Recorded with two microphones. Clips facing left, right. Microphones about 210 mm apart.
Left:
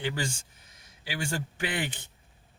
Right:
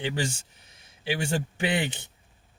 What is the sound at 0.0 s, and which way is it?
Speech, 20° right (ahead or behind).